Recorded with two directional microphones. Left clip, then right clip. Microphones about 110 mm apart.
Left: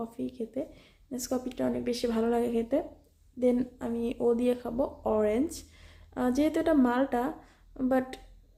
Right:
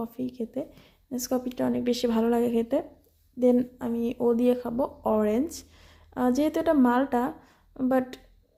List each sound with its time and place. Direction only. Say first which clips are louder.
0.0 s speech: right 3 dB; 30° right (ahead or behind)